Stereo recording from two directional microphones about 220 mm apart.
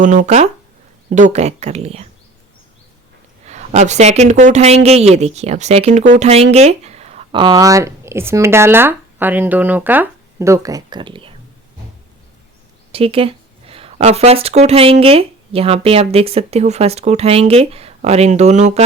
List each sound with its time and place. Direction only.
0.0 s speech: 35° right (ahead or behind)
3.4 s speech: 30° right (ahead or behind)
12.9 s speech: 25° right (ahead or behind)